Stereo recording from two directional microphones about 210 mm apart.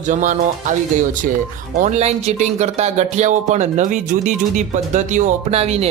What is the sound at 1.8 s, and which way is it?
Speech, 35° right (ahead or behind).